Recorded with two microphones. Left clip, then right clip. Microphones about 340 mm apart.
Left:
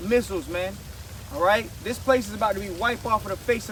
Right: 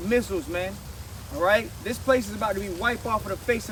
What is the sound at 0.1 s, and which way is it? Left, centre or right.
Speech, centre.